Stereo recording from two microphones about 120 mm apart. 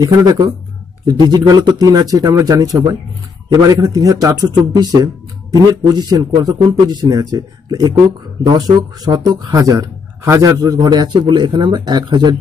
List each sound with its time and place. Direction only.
0.0 s a man's voice: 35° right (ahead or behind)